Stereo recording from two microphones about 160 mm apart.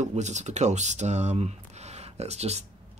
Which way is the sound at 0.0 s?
45° right (ahead or behind).